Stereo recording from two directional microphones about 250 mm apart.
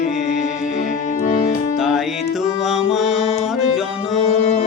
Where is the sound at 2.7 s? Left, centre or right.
Centre.